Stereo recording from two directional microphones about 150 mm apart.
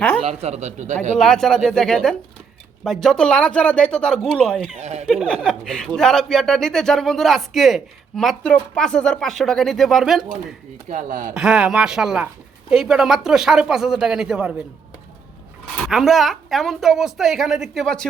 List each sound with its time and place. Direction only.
0.4 s a man's voice: 50° right (ahead or behind)
1.2 s speech: 5° left (ahead or behind)
4.8 s speech: 50° right (ahead or behind)
5.0 s speech: centre (ahead or behind)
10.8 s speech: 60° right (ahead or behind)
11.3 s speech: 5° right (ahead or behind)
15.9 s speech: centre (ahead or behind)